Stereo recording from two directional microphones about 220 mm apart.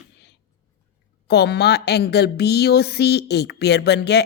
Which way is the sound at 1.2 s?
50° left (ahead or behind).